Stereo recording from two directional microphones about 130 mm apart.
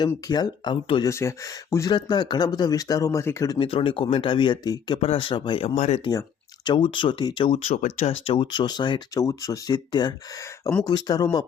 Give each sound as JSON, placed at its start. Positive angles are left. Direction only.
{"t": 0.3, "sound": "speech", "side_deg": 35}
{"t": 1.0, "sound": "speech", "side_deg": 20}
{"t": 1.9, "sound": "speech", "side_deg": 35}
{"t": 3.6, "sound": "speech", "side_deg": 45}
{"t": 4.9, "sound": "speech", "side_deg": 45}
{"t": 5.7, "sound": "speech", "side_deg": 60}
{"t": 6.7, "sound": "speech", "side_deg": 35}
{"t": 7.8, "sound": "speech", "side_deg": 90}
{"t": 8.0, "sound": "speech", "side_deg": 45}